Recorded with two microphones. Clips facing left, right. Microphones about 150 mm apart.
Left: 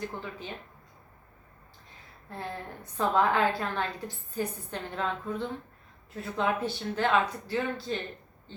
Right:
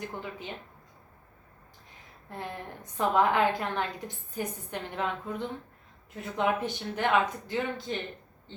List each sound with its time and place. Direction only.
0.1 s a woman's voice: 15° right (ahead or behind)
2.3 s a woman's voice: 15° right (ahead or behind)